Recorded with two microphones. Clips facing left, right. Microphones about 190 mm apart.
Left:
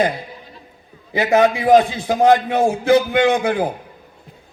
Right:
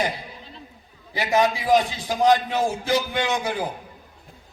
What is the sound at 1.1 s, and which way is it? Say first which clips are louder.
A man's voice: left 6 dB; 55° left (ahead or behind).